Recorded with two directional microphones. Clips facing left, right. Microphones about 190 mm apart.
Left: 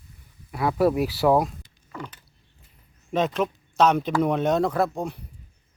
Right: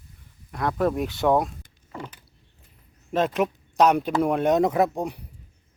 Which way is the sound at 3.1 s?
5° right (ahead or behind).